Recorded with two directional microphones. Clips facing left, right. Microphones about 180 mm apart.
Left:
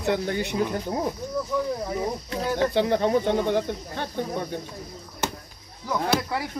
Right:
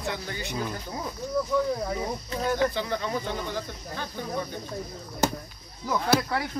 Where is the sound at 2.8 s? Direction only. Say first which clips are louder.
Left 8 dB; 60° left (ahead or behind).